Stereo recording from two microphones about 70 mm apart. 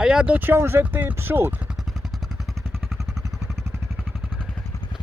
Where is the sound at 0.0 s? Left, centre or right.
Centre.